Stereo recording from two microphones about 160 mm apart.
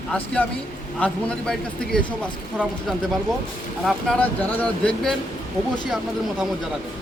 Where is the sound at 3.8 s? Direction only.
5° left (ahead or behind).